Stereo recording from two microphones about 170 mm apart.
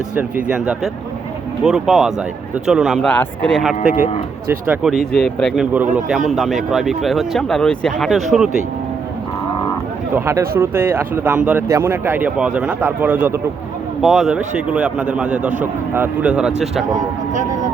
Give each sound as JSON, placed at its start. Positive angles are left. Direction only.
{"t": 0.2, "sound": "a man's voice", "side_deg": -10}
{"t": 3.1, "sound": "a man's voice", "side_deg": 10}
{"t": 5.7, "sound": "a man's voice", "side_deg": -10}
{"t": 10.2, "sound": "a man's voice", "side_deg": -15}